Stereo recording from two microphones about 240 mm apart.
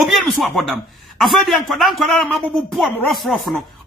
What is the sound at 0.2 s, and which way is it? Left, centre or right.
A man's voice, centre.